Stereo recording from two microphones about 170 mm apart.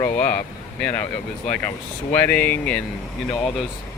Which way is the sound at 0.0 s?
10° left (ahead or behind).